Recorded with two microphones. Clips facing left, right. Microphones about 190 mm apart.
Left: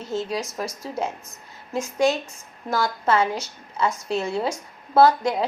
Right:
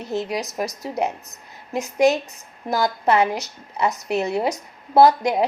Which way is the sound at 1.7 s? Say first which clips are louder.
Right 3 dB; 20° right (ahead or behind).